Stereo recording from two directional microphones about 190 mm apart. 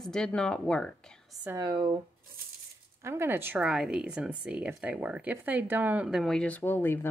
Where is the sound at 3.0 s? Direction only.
10° right (ahead or behind); by 6.9 s 10° left (ahead or behind).